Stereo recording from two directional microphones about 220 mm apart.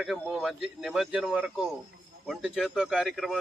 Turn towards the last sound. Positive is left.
turn(degrees=0)  # may be behind; listen again after turning